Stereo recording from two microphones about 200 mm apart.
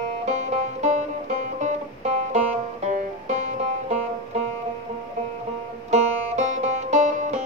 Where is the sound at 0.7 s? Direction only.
35° right (ahead or behind).